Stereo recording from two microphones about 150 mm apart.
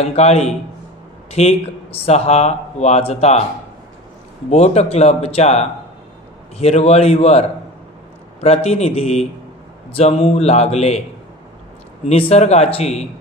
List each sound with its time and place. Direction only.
0.1 s speech: 45° left (ahead or behind)
4.5 s speech: 45° left (ahead or behind)
12.1 s speech: 45° left (ahead or behind)